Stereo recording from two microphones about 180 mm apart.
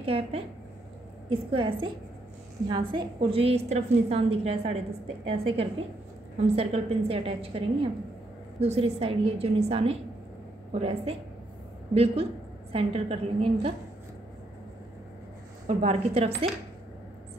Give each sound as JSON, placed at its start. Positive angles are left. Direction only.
{"t": 0.0, "sound": "a woman's voice", "side_deg": -30}
{"t": 1.5, "sound": "a woman's voice", "side_deg": -30}
{"t": 15.6, "sound": "a woman's voice", "side_deg": -35}